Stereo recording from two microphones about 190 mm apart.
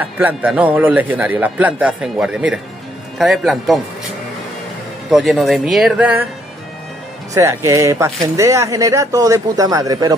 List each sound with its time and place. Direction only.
0.0 s a man's voice: 10° right (ahead or behind)
5.1 s speech: centre (ahead or behind)
7.3 s a man's voice: 15° right (ahead or behind)